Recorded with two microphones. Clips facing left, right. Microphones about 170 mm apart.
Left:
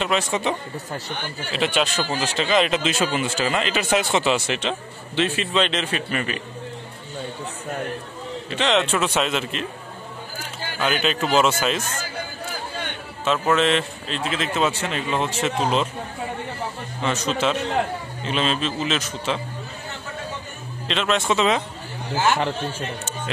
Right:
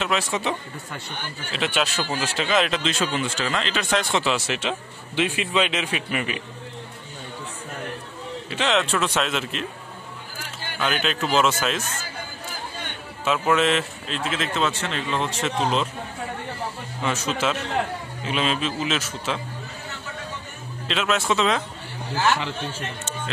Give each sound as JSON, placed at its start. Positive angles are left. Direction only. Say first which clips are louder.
{"t": 0.0, "sound": "a man's voice", "louder": "left 2 dB", "side_deg": 0}
{"t": 8.5, "sound": "speech", "louder": "left 2 dB", "side_deg": -5}
{"t": 10.8, "sound": "speech", "louder": "left 2 dB", "side_deg": 0}
{"t": 13.2, "sound": "speech", "louder": "left 1 dB", "side_deg": -5}
{"t": 17.0, "sound": "speech", "louder": "left 2 dB", "side_deg": -5}
{"t": 20.9, "sound": "speech", "louder": "left 1 dB", "side_deg": -5}
{"t": 22.1, "sound": "a man's voice", "louder": "left 1 dB", "side_deg": 25}